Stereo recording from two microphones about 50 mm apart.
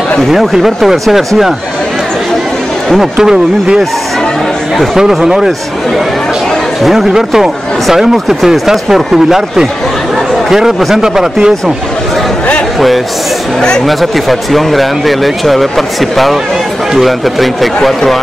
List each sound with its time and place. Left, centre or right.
0.3 s speech: centre
3.2 s speech: centre
4.9 s speech: centre
6.8 s speech: centre
11.0 s speech: centre
13.8 s speech: centre